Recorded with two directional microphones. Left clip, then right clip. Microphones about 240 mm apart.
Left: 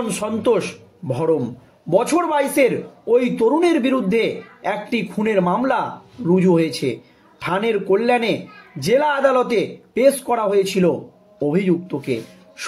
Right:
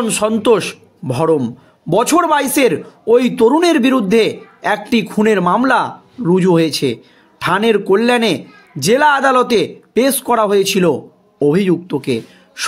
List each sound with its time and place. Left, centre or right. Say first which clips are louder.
0.2 s speech: right 6 dB; right